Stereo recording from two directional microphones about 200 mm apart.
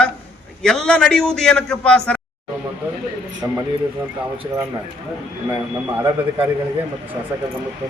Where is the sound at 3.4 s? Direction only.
20° right (ahead or behind).